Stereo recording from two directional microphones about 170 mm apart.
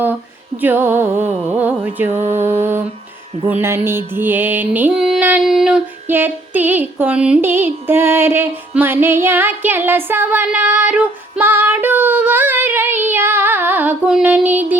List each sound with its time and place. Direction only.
0.6 s music: 10° right (ahead or behind)
2.1 s mantra: 40° right (ahead or behind)
2.4 s music: 15° right (ahead or behind)